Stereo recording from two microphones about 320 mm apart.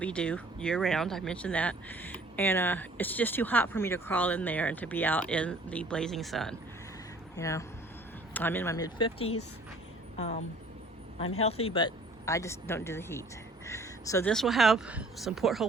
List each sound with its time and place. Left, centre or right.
0.0 s a woman's voice: centre; by 10.4 s left
11.4 s speech: centre